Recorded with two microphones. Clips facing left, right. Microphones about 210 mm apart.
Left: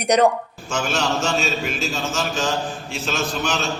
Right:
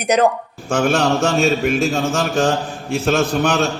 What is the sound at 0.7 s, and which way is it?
Mantra, 55° right (ahead or behind).